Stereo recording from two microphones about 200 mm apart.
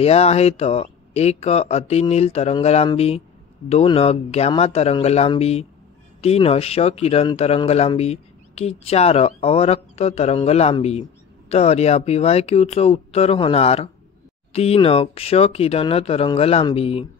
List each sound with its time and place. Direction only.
0.0 s a man's voice: 30° left (ahead or behind)